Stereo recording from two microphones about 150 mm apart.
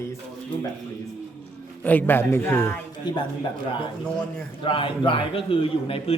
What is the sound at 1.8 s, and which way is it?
Speech, 15° left (ahead or behind).